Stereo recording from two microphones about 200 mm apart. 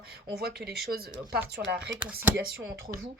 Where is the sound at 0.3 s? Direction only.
50° right (ahead or behind).